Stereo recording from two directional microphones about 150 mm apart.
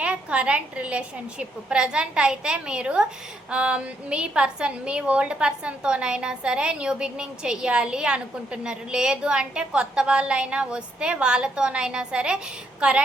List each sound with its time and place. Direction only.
0.0 s a woman's voice: 10° right (ahead or behind)